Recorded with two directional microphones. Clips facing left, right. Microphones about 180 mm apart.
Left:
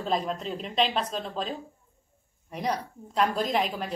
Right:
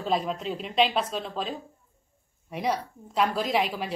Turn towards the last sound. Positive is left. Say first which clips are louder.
# right 1 dB
turn(degrees=-5)  # may be behind; listen again after turning